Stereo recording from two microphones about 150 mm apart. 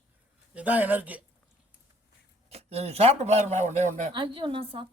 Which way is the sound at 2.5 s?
45° right (ahead or behind).